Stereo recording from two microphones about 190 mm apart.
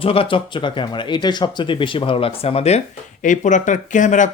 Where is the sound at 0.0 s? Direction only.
30° left (ahead or behind).